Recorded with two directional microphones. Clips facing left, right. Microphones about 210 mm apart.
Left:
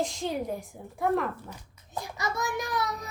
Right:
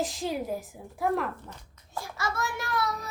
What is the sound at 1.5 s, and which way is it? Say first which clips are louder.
A child's voice: left 1 dB; 20° left (ahead or behind).